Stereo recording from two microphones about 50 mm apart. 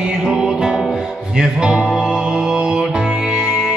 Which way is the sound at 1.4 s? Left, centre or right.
Centre.